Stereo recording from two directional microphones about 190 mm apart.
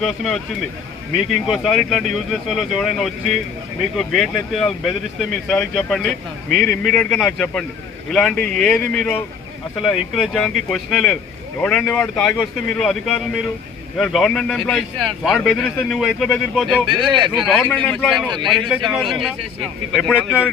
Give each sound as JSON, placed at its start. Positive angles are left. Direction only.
{"t": 0.0, "sound": "a man's voice", "side_deg": 0}
{"t": 1.5, "sound": "a man's voice", "side_deg": 0}
{"t": 16.9, "sound": "speech", "side_deg": -25}
{"t": 17.3, "sound": "a man's voice", "side_deg": 0}